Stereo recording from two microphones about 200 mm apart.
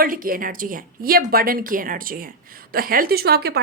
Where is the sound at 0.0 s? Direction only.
45° right (ahead or behind).